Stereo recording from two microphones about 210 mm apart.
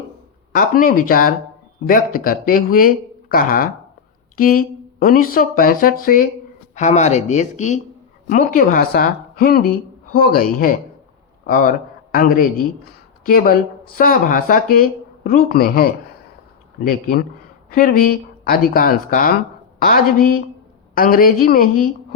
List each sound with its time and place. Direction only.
0.5 s speech: 40° left (ahead or behind)